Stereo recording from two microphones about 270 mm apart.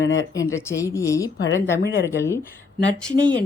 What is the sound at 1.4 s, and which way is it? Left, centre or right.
Speech, left.